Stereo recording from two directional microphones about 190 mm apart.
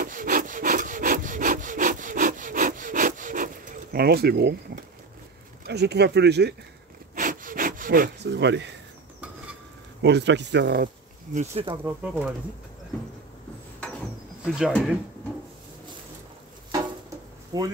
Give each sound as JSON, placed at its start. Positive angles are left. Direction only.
{"t": 0.0, "sound": "wood", "side_deg": -45}
{"t": 5.7, "sound": "speech", "side_deg": -60}
{"t": 7.2, "sound": "sawing", "side_deg": -45}
{"t": 10.0, "sound": "speech", "side_deg": -65}
{"t": 11.3, "sound": "speech", "side_deg": -30}
{"t": 11.8, "sound": "speech", "side_deg": -10}
{"t": 14.4, "sound": "speech", "side_deg": -5}
{"t": 17.5, "sound": "speech", "side_deg": -20}